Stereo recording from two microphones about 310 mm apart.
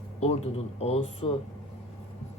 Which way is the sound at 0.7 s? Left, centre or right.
Centre.